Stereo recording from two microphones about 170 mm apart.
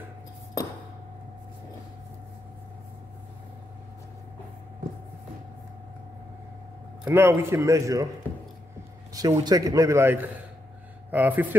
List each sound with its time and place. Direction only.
7.1 s a man's voice: 15° right (ahead or behind)
9.1 s a man's voice: 25° right (ahead or behind)